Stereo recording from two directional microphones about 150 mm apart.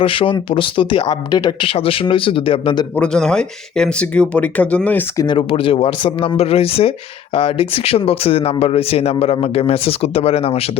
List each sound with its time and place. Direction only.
0.0 s speech: 35° left (ahead or behind)
2.9 s speech: 5° left (ahead or behind)
5.1 s speech: 30° left (ahead or behind)